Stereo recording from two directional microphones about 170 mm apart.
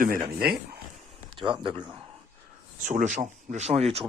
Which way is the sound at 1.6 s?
30° right (ahead or behind).